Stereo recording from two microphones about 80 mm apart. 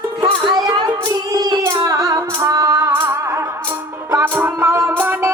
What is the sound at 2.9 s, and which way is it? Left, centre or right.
Music, right.